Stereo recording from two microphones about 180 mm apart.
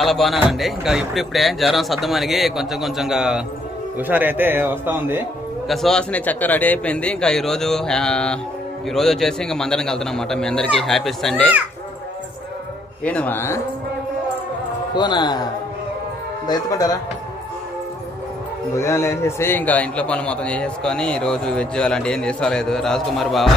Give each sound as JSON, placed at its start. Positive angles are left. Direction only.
{"t": 0.0, "sound": "a man's voice", "side_deg": 0}
{"t": 5.7, "sound": "a man's voice", "side_deg": 0}
{"t": 13.0, "sound": "a man's voice", "side_deg": 5}
{"t": 15.0, "sound": "speech", "side_deg": 25}
{"t": 16.4, "sound": "speech", "side_deg": 20}
{"t": 18.8, "sound": "a man's voice", "side_deg": 15}